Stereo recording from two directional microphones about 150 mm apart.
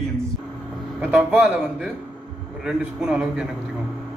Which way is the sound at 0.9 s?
10° right (ahead or behind).